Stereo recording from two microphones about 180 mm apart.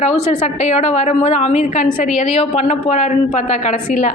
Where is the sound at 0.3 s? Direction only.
40° left (ahead or behind).